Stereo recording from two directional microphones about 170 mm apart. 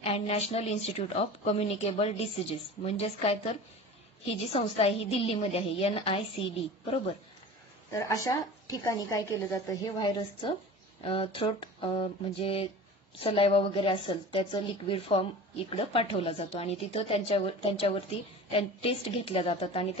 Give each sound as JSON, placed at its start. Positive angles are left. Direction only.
{"t": 0.0, "sound": "a woman's voice", "side_deg": 40}
{"t": 7.9, "sound": "a woman's voice", "side_deg": 20}